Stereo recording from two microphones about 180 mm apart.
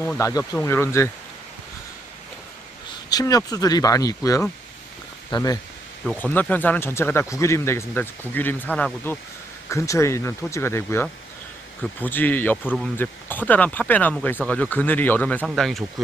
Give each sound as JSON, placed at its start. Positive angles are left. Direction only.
{"t": 0.0, "sound": "speech", "side_deg": 15}
{"t": 3.1, "sound": "speech", "side_deg": 20}
{"t": 6.0, "sound": "speech", "side_deg": 10}